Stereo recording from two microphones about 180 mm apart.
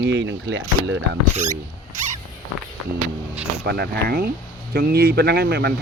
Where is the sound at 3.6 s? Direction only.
60° right (ahead or behind).